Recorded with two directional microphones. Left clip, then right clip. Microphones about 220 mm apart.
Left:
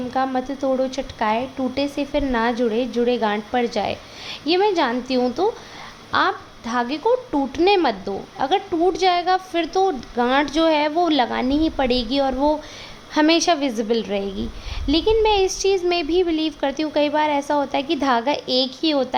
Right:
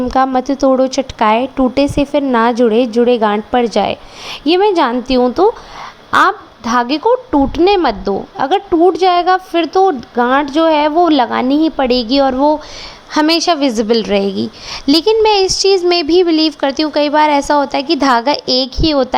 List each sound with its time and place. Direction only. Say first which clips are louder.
0.1 s a woman's voice: right 9 dB; 35° right (ahead or behind); by 19.0 s 20° right (ahead or behind)